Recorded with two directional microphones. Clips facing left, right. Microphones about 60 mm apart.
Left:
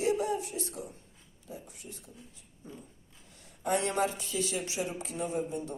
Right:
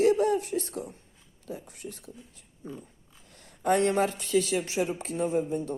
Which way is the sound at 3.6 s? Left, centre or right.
Right.